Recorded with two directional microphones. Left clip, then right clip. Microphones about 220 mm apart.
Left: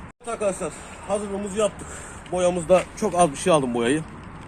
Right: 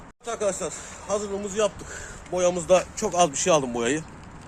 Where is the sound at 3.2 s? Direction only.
10° left (ahead or behind).